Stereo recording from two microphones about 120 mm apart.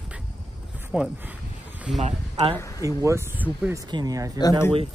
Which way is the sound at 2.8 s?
25° right (ahead or behind).